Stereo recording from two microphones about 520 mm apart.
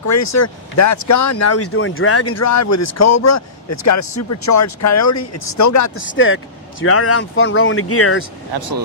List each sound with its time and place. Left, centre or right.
0.0 s speech: left
6.1 s speech: left
8.5 s speech: right